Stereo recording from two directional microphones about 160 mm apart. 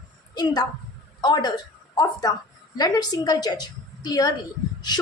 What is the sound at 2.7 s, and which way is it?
A woman's voice, 25° left (ahead or behind).